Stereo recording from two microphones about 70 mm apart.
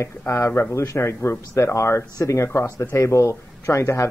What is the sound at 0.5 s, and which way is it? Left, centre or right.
Speech, left.